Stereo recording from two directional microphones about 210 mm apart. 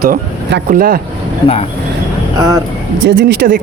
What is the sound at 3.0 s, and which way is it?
Speech, 50° right (ahead or behind).